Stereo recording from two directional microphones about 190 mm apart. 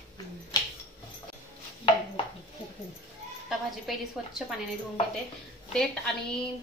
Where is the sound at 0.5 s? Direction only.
20° left (ahead or behind).